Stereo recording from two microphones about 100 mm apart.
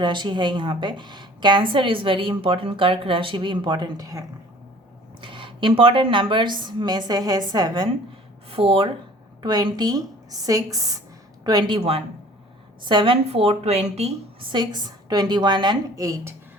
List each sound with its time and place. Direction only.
0.0 s a woman's voice: 50° right (ahead or behind); by 4.3 s 35° right (ahead or behind)
5.2 s a woman's voice: 55° right (ahead or behind)
8.4 s speech: 70° right (ahead or behind)
9.4 s a woman's voice: 45° right (ahead or behind)
11.4 s a woman's voice: 50° right (ahead or behind)
11.8 s a man's voice: 85° right
12.8 s a woman's voice: 50° right (ahead or behind)
13.2 s a woman's voice: 85° right
14.5 s a woman's voice: 45° right (ahead or behind)
16.0 s a woman's voice: 30° right (ahead or behind)